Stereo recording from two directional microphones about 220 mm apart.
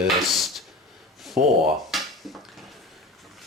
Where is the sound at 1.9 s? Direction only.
Centre (ahead or behind).